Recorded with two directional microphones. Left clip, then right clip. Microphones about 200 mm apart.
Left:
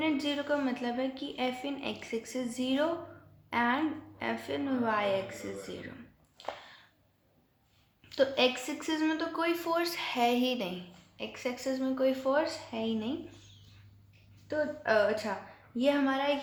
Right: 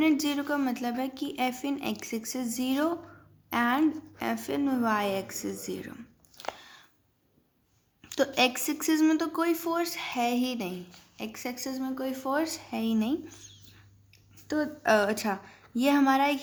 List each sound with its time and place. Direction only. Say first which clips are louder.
0.0 s a woman's voice: right 5 dB; 50° right (ahead or behind)
8.1 s speech: right 1 dB; 45° right (ahead or behind)
14.4 s a woman's voice: right 3 dB; 45° right (ahead or behind)